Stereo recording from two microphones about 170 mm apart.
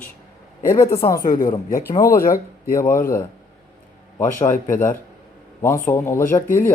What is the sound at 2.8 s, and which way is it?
Speech, 55° left (ahead or behind).